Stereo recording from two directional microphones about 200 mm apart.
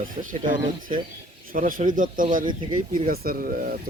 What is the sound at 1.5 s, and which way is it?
Speech, 45° right (ahead or behind).